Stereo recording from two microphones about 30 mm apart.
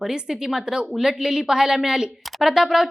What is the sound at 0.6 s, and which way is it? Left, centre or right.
Speech, right.